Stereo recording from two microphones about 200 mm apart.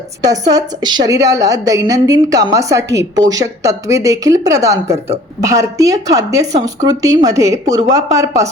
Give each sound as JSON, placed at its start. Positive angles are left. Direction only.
{"t": 0.3, "sound": "a woman's voice", "side_deg": -20}
{"t": 4.9, "sound": "speech", "side_deg": -30}
{"t": 5.4, "sound": "a woman's voice", "side_deg": -15}